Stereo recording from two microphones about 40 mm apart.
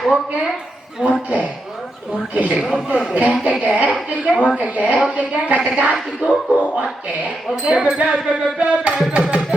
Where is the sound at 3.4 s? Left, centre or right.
Right.